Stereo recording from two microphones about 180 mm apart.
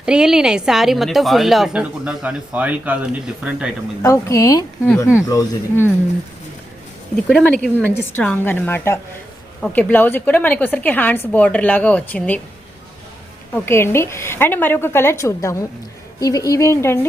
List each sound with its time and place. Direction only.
0.0 s speech: 5° right (ahead or behind)
4.0 s a woman's voice: 15° left (ahead or behind)
7.3 s a woman's voice: 5° left (ahead or behind)
13.5 s a woman's voice: 15° left (ahead or behind)